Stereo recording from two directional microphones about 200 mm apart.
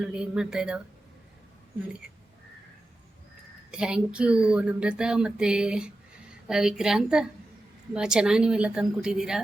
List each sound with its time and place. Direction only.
0.0 s speech: 5° right (ahead or behind)
3.7 s speech: 5° right (ahead or behind)